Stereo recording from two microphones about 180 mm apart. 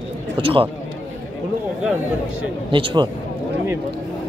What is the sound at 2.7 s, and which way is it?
Speech, 25° right (ahead or behind).